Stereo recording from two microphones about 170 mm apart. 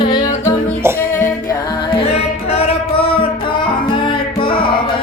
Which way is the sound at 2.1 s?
35° left (ahead or behind).